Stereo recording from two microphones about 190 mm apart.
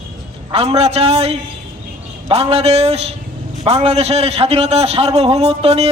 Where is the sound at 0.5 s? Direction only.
30° right (ahead or behind).